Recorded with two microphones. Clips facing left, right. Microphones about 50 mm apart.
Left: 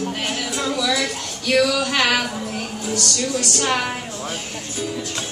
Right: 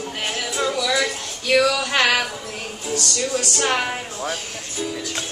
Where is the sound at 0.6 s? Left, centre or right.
Centre.